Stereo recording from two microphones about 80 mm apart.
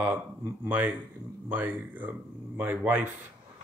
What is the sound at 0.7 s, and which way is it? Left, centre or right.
A man's voice, centre.